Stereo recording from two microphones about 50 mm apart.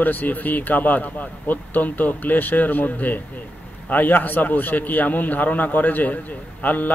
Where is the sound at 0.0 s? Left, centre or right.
Left.